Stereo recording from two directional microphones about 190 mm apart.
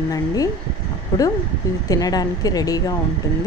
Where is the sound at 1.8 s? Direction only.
20° left (ahead or behind).